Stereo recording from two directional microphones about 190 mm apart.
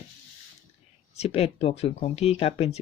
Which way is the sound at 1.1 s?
35° left (ahead or behind).